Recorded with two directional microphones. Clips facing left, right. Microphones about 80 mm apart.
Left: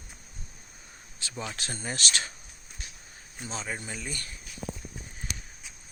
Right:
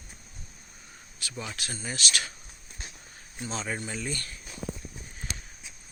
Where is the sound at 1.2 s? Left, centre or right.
Left.